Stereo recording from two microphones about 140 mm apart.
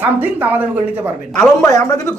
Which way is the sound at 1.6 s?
25° left (ahead or behind).